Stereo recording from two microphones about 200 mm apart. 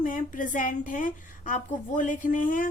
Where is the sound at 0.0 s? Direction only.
40° left (ahead or behind).